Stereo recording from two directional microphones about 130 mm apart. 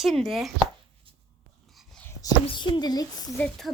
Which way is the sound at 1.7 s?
5° left (ahead or behind).